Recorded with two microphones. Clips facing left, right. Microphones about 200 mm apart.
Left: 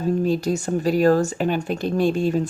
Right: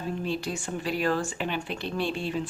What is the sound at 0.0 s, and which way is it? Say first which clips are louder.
Speech: left 10 dB; 40° left (ahead or behind).